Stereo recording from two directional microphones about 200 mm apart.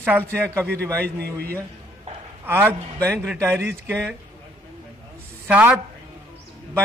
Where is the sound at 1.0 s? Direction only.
50° right (ahead or behind).